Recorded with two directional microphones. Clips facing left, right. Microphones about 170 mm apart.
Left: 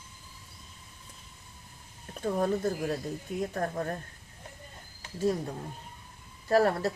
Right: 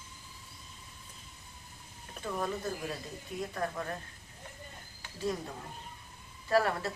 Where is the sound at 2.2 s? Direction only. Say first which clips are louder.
Left 7 dB; 45° left (ahead or behind).